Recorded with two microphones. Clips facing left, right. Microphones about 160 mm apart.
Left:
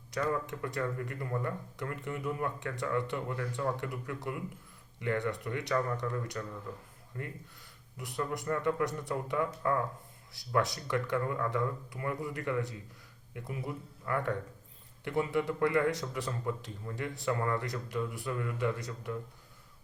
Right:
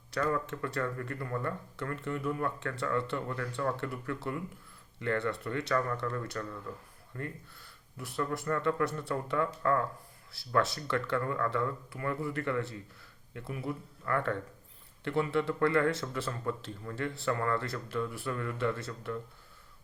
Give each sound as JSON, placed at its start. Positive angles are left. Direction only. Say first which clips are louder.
{"t": 0.1, "sound": "speech", "louder": "right 1 dB", "side_deg": 15}